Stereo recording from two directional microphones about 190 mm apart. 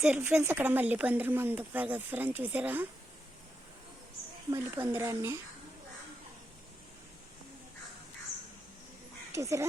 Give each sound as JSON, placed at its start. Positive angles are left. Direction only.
{"t": 0.0, "sound": "speech", "side_deg": -10}
{"t": 4.5, "sound": "speech", "side_deg": -20}
{"t": 9.3, "sound": "speech", "side_deg": -15}